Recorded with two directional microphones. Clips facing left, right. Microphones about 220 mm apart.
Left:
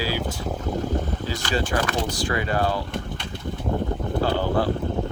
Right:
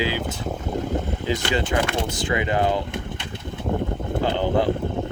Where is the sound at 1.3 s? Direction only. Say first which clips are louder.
Right 3 dB; 20° right (ahead or behind).